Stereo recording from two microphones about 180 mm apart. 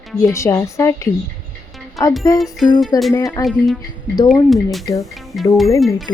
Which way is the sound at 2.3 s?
Centre (ahead or behind).